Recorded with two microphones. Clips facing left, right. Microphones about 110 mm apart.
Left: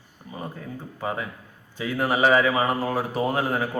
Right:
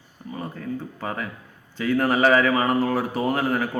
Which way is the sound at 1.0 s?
20° left (ahead or behind).